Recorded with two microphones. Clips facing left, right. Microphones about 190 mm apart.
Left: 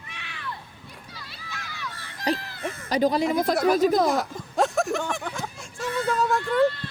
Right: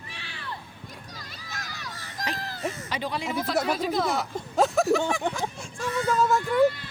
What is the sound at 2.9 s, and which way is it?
Speech, 40° left (ahead or behind).